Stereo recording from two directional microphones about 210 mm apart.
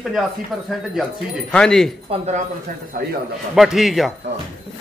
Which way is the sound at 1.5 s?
5° left (ahead or behind).